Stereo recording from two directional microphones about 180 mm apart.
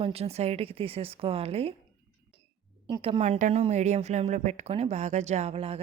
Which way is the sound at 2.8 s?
30° right (ahead or behind).